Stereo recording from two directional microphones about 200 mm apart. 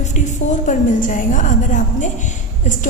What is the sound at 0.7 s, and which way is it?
A woman's voice, 40° left (ahead or behind).